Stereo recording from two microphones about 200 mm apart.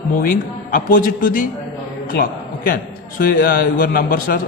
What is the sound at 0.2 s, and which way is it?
A man's voice, 45° left (ahead or behind).